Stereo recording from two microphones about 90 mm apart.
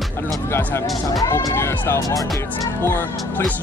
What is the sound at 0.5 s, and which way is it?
Speech, 25° left (ahead or behind).